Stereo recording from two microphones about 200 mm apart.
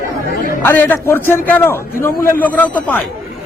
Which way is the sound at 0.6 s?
10° left (ahead or behind).